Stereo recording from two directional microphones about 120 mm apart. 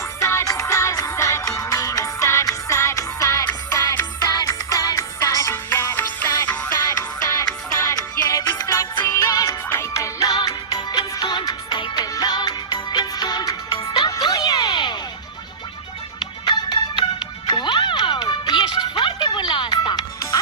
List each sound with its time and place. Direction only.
0.2 s music: 25° left (ahead or behind)
6.7 s music: 30° left (ahead or behind)
16.2 s music: 35° left (ahead or behind)